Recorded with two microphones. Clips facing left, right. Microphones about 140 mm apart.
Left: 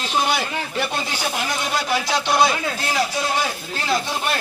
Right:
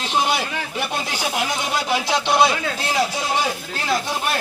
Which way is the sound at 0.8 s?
10° right (ahead or behind).